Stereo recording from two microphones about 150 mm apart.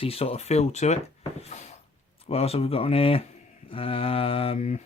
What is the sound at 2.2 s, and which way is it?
Speech, 40° left (ahead or behind).